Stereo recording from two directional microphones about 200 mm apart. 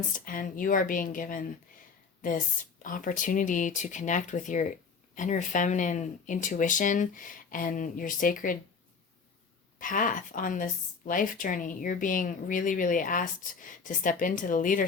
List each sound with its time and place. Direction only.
0.3 s speech: 45° left (ahead or behind)
9.8 s speech: 45° left (ahead or behind)